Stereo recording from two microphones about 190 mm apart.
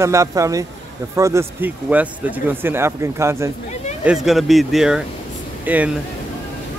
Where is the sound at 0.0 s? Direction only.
15° right (ahead or behind).